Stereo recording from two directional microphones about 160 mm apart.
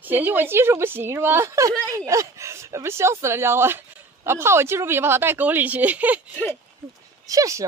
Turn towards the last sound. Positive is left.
turn(degrees=-20)  # may be behind; listen again after turning